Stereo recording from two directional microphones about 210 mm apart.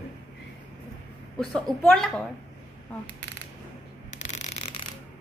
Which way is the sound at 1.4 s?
5° left (ahead or behind).